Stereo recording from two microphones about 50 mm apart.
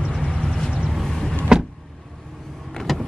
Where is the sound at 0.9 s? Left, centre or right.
Centre.